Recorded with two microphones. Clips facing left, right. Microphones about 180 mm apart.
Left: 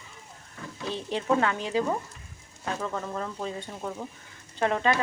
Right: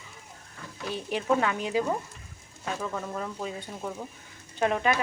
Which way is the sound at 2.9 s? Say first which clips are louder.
Left 1 dB; 5° right (ahead or behind).